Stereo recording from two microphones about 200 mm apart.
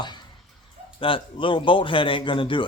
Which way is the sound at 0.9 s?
25° left (ahead or behind).